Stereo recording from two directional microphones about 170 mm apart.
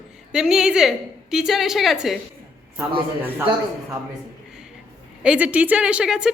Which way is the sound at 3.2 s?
10° right (ahead or behind).